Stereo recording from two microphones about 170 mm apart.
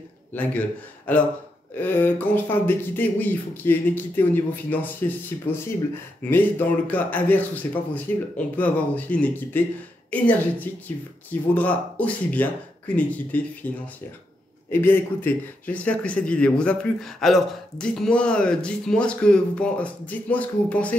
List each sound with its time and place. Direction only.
0.3 s speech: 10° left (ahead or behind)
14.7 s speech: 10° left (ahead or behind)